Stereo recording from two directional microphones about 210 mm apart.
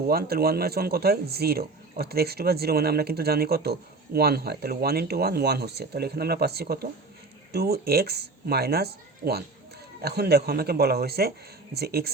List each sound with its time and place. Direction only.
0.1 s speech: 45° right (ahead or behind)